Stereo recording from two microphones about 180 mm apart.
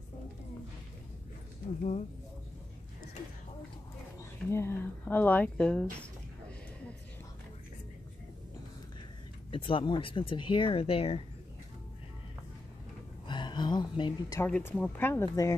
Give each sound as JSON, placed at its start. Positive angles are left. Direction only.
{"t": 1.8, "sound": "speech", "side_deg": 40}
{"t": 4.5, "sound": "speech", "side_deg": 15}
{"t": 9.5, "sound": "speech", "side_deg": 30}
{"t": 13.3, "sound": "a sound", "side_deg": 25}
{"t": 14.4, "sound": "speech", "side_deg": 10}